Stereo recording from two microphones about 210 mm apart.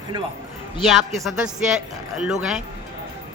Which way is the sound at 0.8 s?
Centre (ahead or behind).